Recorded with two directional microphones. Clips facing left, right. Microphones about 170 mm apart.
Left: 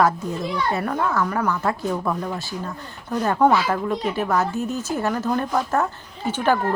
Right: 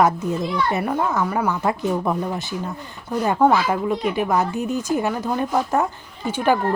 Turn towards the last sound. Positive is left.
turn(degrees=-10)  # may be behind; listen again after turning